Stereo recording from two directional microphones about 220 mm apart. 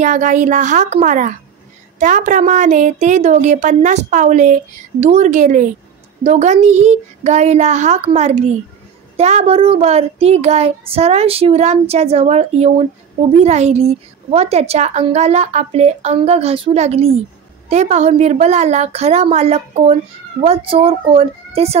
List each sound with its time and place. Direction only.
0.0 s a woman's voice: 35° right (ahead or behind)